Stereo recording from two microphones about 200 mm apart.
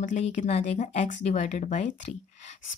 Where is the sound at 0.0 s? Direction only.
35° left (ahead or behind).